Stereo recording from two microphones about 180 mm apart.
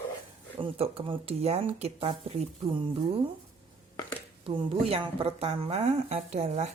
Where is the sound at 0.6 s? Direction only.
30° right (ahead or behind).